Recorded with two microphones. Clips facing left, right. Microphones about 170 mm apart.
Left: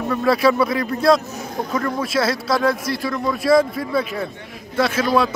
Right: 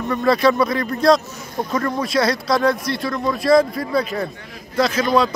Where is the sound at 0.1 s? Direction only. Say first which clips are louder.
Right 1 dB; 5° left (ahead or behind).